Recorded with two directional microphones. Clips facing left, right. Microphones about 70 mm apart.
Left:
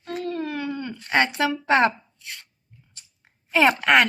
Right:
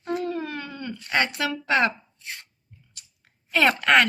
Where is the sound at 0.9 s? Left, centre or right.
Left.